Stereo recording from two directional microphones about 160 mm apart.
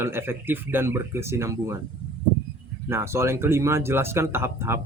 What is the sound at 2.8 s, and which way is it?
Speech, 15° right (ahead or behind).